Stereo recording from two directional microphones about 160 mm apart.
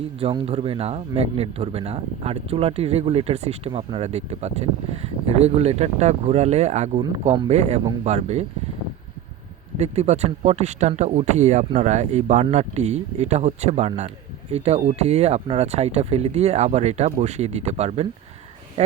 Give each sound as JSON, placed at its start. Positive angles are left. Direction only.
{"t": 0.2, "sound": "speech", "side_deg": -35}
{"t": 9.7, "sound": "speech", "side_deg": -40}